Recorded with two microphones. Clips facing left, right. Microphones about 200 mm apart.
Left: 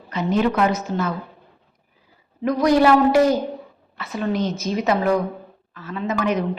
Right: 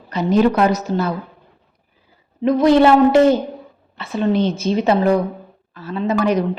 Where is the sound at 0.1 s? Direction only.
35° right (ahead or behind).